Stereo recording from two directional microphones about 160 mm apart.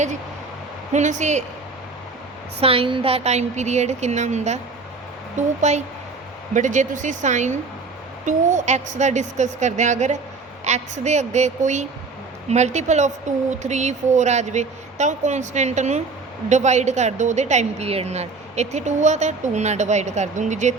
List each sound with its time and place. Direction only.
0.9 s a woman's voice: 45° right (ahead or behind)
2.6 s a woman's voice: 35° right (ahead or behind)